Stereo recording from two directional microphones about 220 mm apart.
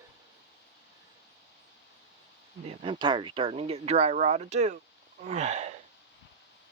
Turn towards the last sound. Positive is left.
turn(degrees=-30)  # may be behind; listen again after turning